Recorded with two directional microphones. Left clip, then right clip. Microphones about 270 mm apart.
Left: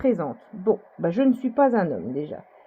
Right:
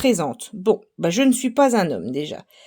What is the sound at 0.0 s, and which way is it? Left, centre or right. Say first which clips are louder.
Speech: right 4 dB; right.